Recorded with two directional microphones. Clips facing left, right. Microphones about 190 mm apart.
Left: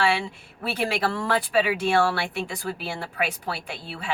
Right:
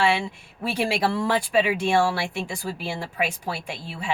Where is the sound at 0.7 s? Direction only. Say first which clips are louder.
Right 2 dB; 10° right (ahead or behind).